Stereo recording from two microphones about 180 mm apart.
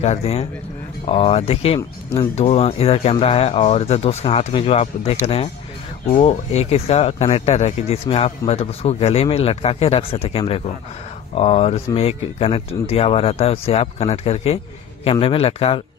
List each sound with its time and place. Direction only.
0.0 s speech: 35° left (ahead or behind)
1.8 s speech: 15° left (ahead or behind)
2.3 s speech: 35° left (ahead or behind)